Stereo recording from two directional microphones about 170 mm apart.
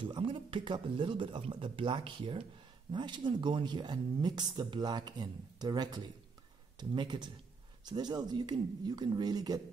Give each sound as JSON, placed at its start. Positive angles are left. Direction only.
{"t": 0.0, "sound": "speech", "side_deg": -30}